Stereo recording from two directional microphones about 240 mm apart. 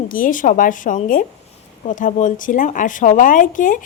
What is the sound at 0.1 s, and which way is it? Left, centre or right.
Speech, left.